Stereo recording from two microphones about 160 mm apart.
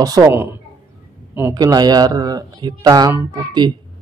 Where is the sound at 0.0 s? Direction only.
25° right (ahead or behind).